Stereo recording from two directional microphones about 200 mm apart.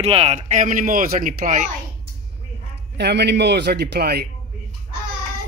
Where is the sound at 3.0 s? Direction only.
55° right (ahead or behind).